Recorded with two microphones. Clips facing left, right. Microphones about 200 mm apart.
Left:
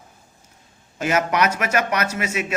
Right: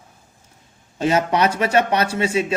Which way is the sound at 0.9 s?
30° right (ahead or behind).